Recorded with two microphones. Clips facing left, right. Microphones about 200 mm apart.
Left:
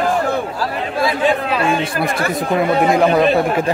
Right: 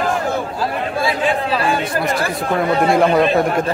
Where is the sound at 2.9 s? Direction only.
Centre (ahead or behind).